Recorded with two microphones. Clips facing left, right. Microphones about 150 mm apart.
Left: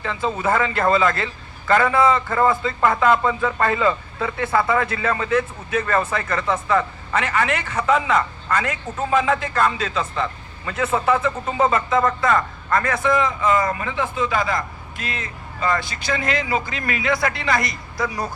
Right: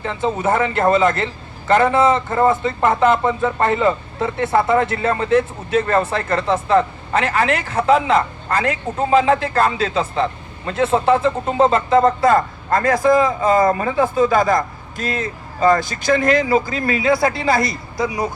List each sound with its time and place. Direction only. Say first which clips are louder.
0.0 s a man's voice: right 3 dB; 25° right (ahead or behind)